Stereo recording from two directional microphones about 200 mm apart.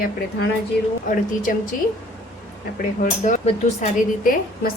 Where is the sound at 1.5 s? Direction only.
45° left (ahead or behind).